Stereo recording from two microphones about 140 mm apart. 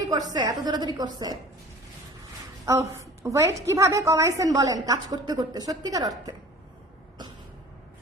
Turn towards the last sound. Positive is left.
turn(degrees=-25)  # may be behind; listen again after turning